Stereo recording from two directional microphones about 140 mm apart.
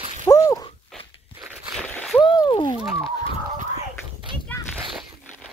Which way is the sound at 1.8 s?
10° left (ahead or behind).